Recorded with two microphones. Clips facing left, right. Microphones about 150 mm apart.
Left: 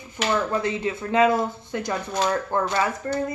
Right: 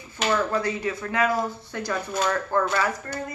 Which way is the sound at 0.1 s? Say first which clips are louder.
Even; 20° left (ahead or behind).